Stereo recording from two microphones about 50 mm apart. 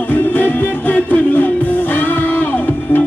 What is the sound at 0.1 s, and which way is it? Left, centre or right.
Music, left.